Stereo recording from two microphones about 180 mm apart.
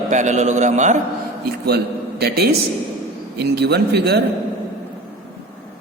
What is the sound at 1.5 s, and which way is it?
A man's voice, 60° right (ahead or behind).